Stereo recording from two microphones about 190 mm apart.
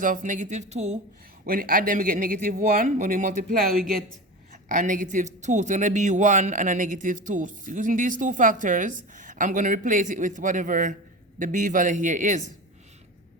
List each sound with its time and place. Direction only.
0.0 s speech: 45° right (ahead or behind)
1.5 s a man's voice: 50° right (ahead or behind)
4.7 s a man's voice: 45° right (ahead or behind)